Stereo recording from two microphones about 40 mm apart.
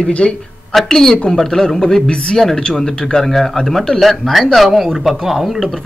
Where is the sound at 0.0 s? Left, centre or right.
Left.